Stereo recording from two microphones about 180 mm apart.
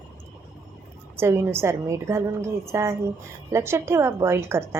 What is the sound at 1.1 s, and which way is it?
A woman's voice, 15° right (ahead or behind).